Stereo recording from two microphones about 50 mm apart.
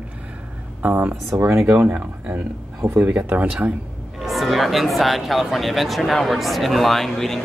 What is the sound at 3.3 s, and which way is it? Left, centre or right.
Speech, right.